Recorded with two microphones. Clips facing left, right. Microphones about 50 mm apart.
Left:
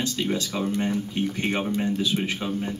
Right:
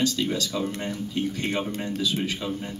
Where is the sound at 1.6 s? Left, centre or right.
Centre.